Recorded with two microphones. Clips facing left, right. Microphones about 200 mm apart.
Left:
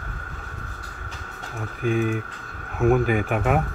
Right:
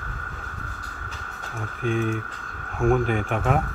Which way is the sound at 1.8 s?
Centre (ahead or behind).